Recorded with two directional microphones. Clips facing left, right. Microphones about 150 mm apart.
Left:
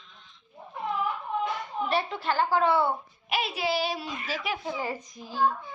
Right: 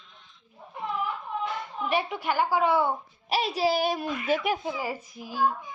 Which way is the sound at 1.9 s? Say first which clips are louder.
Right 2 dB; 15° right (ahead or behind).